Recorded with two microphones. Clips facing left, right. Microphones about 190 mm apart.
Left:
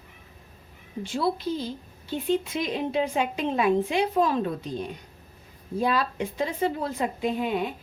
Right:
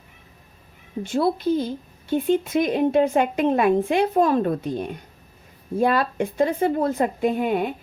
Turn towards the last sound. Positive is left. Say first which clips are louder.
# right 5 dB
turn(degrees=-55)  # may be behind; listen again after turning